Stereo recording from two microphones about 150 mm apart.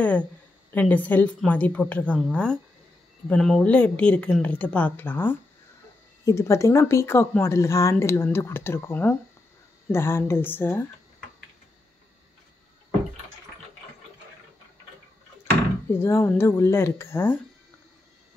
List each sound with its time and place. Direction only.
0.7 s speech: 10° left (ahead or behind)
15.9 s speech: 15° left (ahead or behind)